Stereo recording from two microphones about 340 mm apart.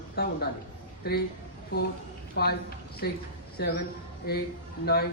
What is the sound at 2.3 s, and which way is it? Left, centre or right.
A woman's voice, left.